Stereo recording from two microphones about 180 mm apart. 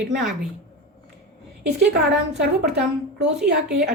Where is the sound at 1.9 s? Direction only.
70° right (ahead or behind).